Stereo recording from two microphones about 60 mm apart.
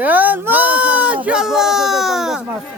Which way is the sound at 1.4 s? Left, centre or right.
Centre.